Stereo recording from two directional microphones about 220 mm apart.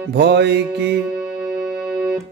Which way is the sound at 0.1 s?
50° right (ahead or behind).